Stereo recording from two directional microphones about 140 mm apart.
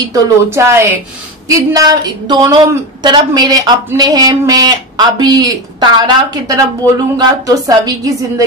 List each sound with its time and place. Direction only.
0.0 s speech: 20° right (ahead or behind)